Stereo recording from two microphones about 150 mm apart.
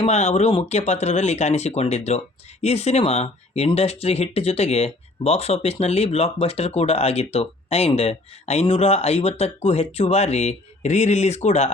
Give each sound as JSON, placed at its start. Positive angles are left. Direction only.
{"t": 0.0, "sound": "speech", "side_deg": 45}